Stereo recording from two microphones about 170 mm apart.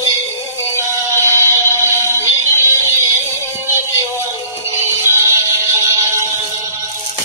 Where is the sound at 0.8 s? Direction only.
15° right (ahead or behind).